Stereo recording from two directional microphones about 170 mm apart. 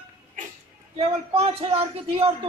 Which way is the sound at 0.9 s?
35° right (ahead or behind).